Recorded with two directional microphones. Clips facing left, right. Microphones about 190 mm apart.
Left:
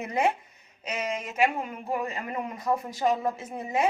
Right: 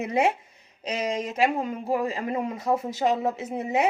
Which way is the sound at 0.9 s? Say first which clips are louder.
Right 4 dB; 35° right (ahead or behind).